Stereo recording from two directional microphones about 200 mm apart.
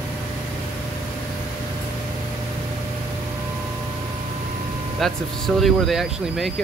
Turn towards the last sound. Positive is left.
turn(degrees=0)  # may be behind; listen again after turning